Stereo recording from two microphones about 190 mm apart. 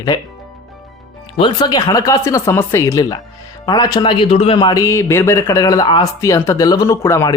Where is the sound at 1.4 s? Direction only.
25° left (ahead or behind).